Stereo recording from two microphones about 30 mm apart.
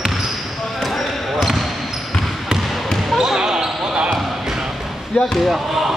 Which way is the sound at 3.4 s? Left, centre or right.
Centre.